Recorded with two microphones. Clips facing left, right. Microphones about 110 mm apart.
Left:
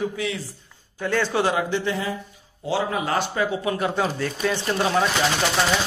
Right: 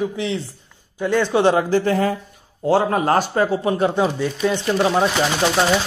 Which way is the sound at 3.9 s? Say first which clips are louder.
Right 5 dB; 20° right (ahead or behind).